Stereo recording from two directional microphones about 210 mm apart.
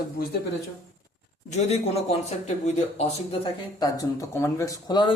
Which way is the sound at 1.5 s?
30° left (ahead or behind).